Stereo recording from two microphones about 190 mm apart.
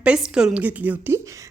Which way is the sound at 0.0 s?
5° right (ahead or behind).